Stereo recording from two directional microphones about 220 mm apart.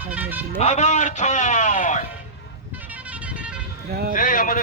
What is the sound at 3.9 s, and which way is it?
Speech, 45° right (ahead or behind).